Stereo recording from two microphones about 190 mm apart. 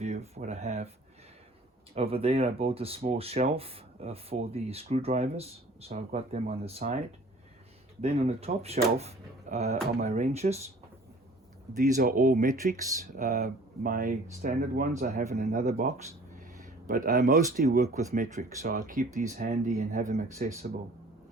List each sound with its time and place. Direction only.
0.0 s speech: 35° right (ahead or behind)
2.0 s speech: 30° right (ahead or behind)
8.0 s speech: 35° right (ahead or behind)
11.7 s speech: 40° right (ahead or behind)